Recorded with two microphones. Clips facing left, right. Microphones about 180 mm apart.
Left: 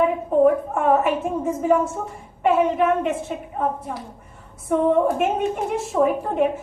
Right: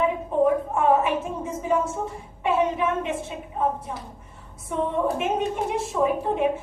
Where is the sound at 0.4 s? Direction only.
50° left (ahead or behind).